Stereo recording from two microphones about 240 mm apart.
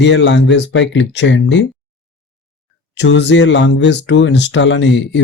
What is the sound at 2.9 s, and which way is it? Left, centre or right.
A man's voice, left.